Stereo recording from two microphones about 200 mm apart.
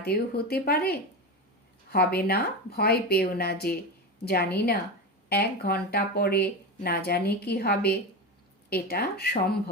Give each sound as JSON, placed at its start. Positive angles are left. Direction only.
{"t": 0.0, "sound": "speech", "side_deg": 50}